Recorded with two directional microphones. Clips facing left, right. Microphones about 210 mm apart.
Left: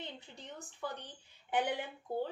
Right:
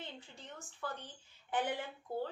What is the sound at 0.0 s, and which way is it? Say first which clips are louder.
A woman's voice: left 2 dB; 15° left (ahead or behind).